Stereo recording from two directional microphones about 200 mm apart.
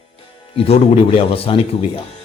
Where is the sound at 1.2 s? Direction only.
30° left (ahead or behind).